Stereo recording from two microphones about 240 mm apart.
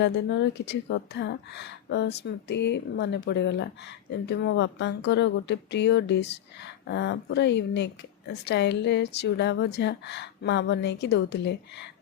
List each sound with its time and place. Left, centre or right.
0.0 s speech: left